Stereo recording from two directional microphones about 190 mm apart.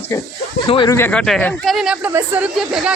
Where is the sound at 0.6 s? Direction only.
25° left (ahead or behind).